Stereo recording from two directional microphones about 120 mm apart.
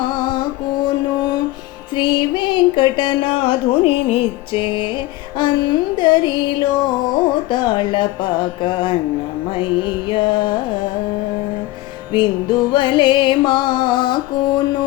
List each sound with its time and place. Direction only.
0.0 s music: 40° left (ahead or behind)
7.5 s speech: 40° left (ahead or behind)
10.1 s carnatic music: 45° left (ahead or behind)
12.1 s music: 40° left (ahead or behind)